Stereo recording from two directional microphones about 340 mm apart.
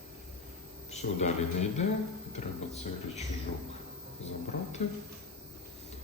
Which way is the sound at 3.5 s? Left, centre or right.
Left.